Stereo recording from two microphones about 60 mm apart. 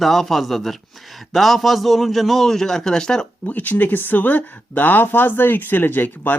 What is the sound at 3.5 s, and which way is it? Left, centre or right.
Speech, left.